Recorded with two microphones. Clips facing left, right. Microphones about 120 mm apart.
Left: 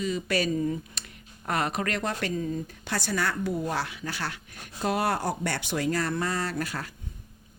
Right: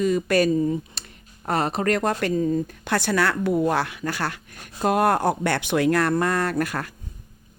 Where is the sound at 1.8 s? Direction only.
45° right (ahead or behind).